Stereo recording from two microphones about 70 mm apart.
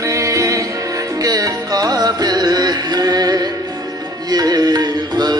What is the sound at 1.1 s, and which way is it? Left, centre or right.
Music, right.